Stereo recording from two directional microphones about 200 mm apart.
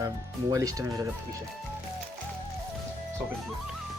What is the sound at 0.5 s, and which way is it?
Speech, 15° right (ahead or behind).